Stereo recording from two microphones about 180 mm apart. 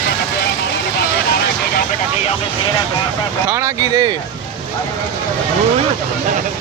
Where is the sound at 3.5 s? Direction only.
15° right (ahead or behind).